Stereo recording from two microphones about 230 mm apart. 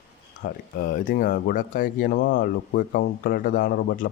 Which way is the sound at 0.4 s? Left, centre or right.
Left.